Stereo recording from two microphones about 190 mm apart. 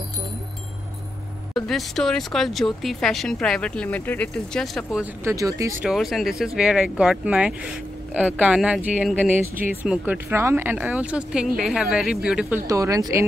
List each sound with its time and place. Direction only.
1.5 s speech: centre (ahead or behind)
5.2 s speech: 20° right (ahead or behind)
5.9 s speech: centre (ahead or behind); by 13.0 s 15° right (ahead or behind)